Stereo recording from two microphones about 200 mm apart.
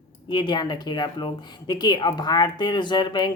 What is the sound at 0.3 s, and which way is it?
Speech, 25° left (ahead or behind).